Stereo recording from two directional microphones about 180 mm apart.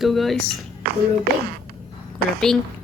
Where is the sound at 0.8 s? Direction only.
60° right (ahead or behind).